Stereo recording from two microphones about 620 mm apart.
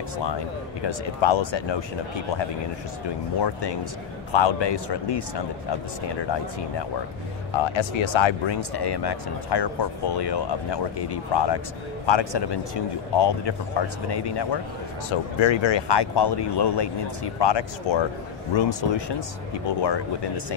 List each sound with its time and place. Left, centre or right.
0.8 s speech: left
3.3 s speech: left
7.5 s speech: left